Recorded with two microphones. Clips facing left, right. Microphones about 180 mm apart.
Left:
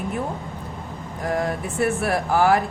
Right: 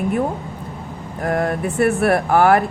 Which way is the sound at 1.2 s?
60° right (ahead or behind).